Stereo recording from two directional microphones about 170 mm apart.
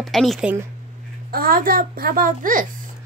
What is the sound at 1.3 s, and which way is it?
A child's voice, 60° right (ahead or behind).